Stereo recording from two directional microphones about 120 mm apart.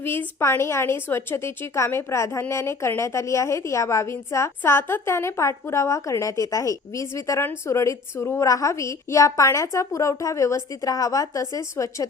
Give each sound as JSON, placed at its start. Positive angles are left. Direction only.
{"t": 0.0, "sound": "a woman's voice", "side_deg": 20}